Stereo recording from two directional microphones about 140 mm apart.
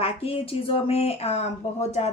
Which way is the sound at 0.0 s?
45° left (ahead or behind).